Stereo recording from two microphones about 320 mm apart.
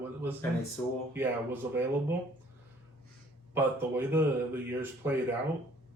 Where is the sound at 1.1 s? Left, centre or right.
Centre.